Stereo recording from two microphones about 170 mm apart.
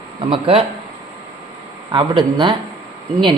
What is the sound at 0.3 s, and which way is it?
Speech, 35° right (ahead or behind).